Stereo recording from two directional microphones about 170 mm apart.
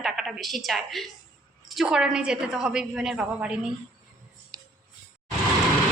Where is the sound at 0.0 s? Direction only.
Centre (ahead or behind).